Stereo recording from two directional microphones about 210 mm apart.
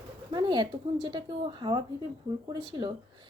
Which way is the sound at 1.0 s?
20° right (ahead or behind).